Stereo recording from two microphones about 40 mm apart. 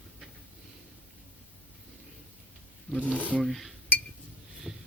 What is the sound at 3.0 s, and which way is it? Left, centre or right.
Speech, left.